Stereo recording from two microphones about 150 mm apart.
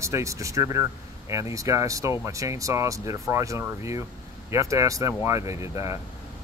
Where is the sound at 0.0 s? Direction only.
20° right (ahead or behind).